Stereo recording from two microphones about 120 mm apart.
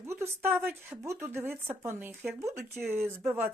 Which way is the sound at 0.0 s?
20° right (ahead or behind).